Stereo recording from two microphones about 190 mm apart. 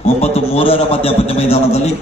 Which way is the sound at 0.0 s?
30° left (ahead or behind).